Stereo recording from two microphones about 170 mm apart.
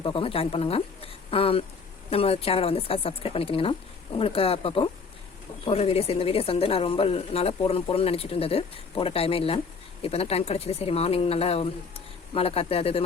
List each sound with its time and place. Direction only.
0.0 s speech: 30° left (ahead or behind)